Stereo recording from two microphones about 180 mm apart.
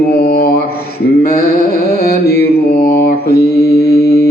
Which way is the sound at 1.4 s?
60° left (ahead or behind).